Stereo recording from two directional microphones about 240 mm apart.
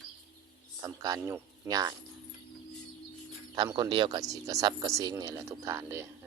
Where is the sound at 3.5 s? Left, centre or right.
Centre.